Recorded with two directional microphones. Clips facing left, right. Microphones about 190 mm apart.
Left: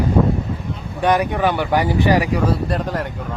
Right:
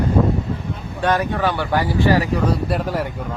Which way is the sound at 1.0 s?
15° left (ahead or behind).